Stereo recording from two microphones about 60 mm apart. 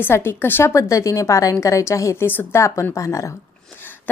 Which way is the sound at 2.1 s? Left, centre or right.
Left.